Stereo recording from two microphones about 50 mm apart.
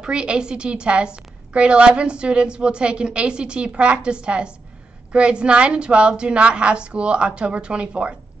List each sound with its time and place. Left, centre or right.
0.0 s a woman's voice: centre